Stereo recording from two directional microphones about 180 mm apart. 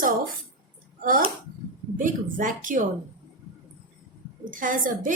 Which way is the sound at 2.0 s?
50° right (ahead or behind).